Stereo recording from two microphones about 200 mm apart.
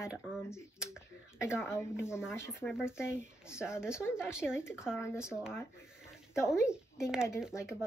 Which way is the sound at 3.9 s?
10° left (ahead or behind).